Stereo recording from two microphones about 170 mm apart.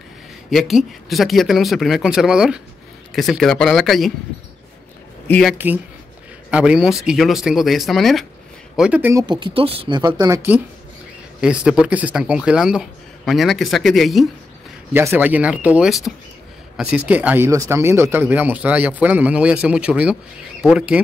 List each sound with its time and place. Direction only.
0.5 s speech: centre (ahead or behind)
5.3 s speech: centre (ahead or behind)
9.2 s speech: 25° right (ahead or behind)
11.4 s speech: 5° right (ahead or behind)
14.9 s speech: 10° right (ahead or behind)